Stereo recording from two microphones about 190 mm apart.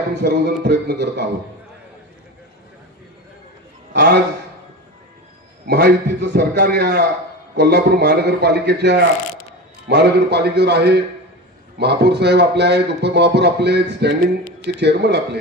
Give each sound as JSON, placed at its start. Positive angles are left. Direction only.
{"t": 0.2, "sound": "a man's voice", "side_deg": -60}
{"t": 3.9, "sound": "a man's voice", "side_deg": -60}
{"t": 5.6, "sound": "a man's voice", "side_deg": -60}